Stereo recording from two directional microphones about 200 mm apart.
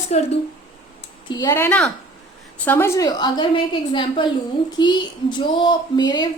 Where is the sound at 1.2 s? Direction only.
20° left (ahead or behind).